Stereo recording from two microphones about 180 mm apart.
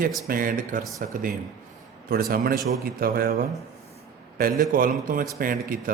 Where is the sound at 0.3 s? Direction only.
50° right (ahead or behind).